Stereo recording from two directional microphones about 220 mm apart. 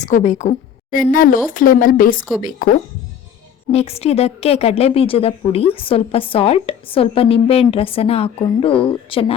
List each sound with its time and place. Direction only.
0.0 s a woman's voice: 35° left (ahead or behind)
3.7 s a woman's voice: 30° left (ahead or behind)